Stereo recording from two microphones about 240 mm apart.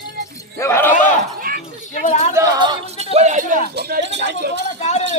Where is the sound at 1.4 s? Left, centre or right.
Right.